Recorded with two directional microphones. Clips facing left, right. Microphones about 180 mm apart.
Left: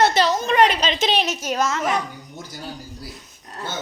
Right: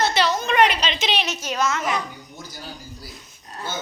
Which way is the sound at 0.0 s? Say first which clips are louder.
Left 3 dB; 45° left (ahead or behind).